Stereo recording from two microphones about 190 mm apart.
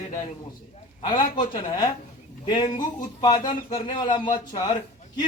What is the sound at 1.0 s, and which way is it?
Speech, 25° left (ahead or behind).